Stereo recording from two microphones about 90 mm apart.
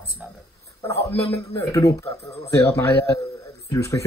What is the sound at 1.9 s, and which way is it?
Speech, 35° left (ahead or behind).